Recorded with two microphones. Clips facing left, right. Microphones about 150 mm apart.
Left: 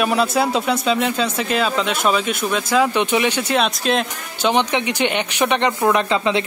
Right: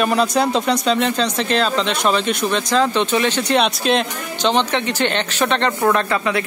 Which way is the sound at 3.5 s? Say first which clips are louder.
Right 3 dB; centre (ahead or behind).